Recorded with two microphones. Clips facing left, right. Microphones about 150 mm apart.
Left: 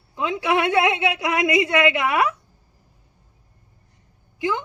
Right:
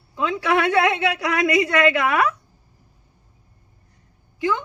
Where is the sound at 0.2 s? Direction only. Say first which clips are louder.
Right 1 dB; 20° left (ahead or behind).